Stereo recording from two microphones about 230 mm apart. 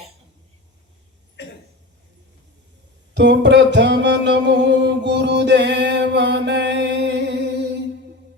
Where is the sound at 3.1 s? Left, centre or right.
Right.